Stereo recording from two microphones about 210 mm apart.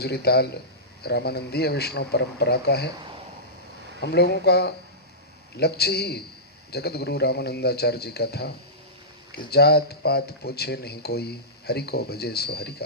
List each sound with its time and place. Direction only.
0.0 s speech: 50° left (ahead or behind)
4.0 s speech: 50° left (ahead or behind)